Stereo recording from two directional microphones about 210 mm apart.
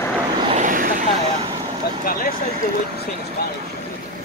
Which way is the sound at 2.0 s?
45° left (ahead or behind).